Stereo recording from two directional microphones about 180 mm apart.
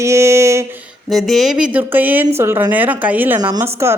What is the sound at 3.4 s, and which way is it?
Speech, 20° right (ahead or behind).